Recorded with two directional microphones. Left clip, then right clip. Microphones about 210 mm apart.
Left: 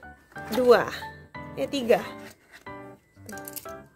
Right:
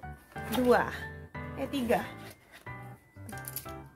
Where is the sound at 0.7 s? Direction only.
55° left (ahead or behind).